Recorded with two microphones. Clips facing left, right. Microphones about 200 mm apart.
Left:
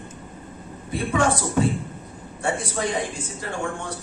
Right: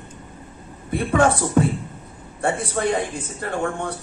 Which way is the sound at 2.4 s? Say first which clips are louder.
Right 4 dB; 55° right (ahead or behind).